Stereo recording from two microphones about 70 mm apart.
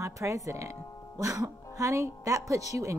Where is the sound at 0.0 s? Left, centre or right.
Right.